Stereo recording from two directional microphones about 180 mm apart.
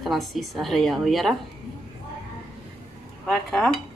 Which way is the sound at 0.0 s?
Centre (ahead or behind).